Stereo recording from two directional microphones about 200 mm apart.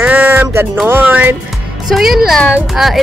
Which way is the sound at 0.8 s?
10° right (ahead or behind).